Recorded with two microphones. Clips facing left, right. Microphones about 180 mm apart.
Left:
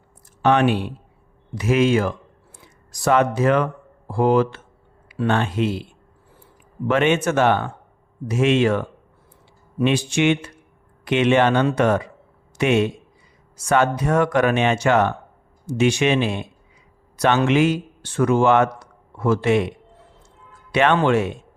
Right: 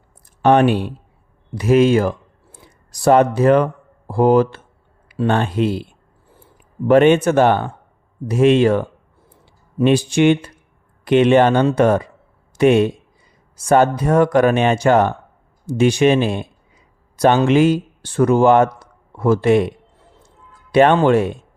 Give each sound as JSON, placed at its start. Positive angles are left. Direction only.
{"t": 0.4, "sound": "speech", "side_deg": -40}
{"t": 6.8, "sound": "speech", "side_deg": -35}
{"t": 9.8, "sound": "a man's voice", "side_deg": -35}
{"t": 20.7, "sound": "speech", "side_deg": -35}